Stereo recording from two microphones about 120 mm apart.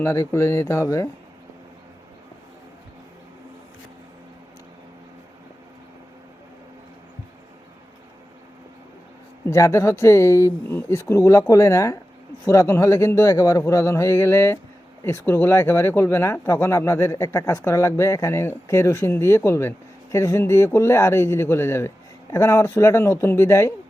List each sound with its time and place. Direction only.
0.0 s speech: 20° left (ahead or behind)
9.5 s speech: 25° left (ahead or behind)